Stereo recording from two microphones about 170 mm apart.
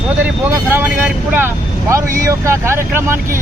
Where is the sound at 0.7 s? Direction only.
10° right (ahead or behind).